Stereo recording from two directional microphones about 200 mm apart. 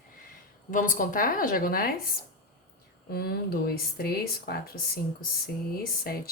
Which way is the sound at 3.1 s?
50° left (ahead or behind).